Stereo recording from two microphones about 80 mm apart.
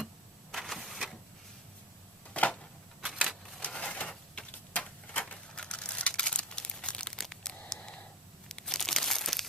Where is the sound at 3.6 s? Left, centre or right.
Centre.